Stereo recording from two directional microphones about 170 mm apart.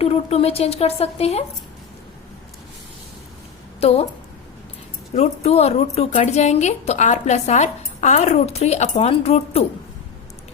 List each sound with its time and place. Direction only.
0.0 s a woman's voice: 35° left (ahead or behind)
3.8 s a woman's voice: 35° left (ahead or behind)
5.1 s a woman's voice: 40° left (ahead or behind)